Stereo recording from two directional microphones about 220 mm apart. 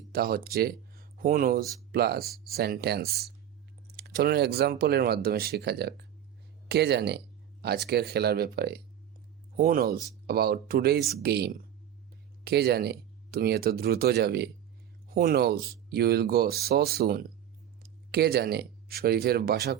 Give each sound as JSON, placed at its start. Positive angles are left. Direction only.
{"t": 0.1, "sound": "speech", "side_deg": -40}